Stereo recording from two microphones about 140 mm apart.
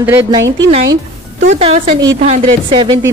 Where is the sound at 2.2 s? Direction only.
35° right (ahead or behind).